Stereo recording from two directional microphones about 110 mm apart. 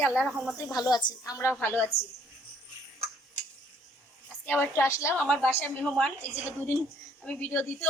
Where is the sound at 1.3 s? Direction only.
20° left (ahead or behind).